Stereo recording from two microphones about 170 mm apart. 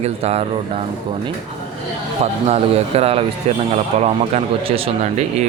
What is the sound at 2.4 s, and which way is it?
Speech, 35° right (ahead or behind).